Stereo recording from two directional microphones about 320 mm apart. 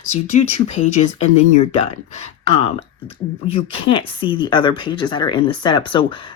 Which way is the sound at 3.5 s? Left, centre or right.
Centre.